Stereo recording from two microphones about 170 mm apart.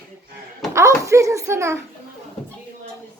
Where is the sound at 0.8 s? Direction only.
15° right (ahead or behind).